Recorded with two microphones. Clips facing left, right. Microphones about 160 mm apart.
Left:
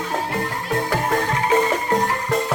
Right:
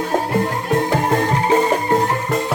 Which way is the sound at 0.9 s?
30° right (ahead or behind).